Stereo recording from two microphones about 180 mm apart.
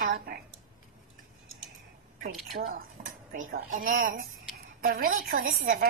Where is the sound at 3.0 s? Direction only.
55° right (ahead or behind).